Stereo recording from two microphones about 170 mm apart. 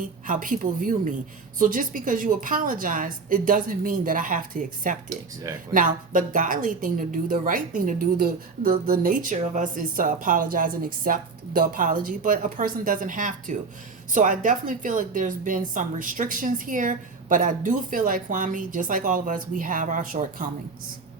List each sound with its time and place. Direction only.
0.3 s a woman's voice: 55° right (ahead or behind)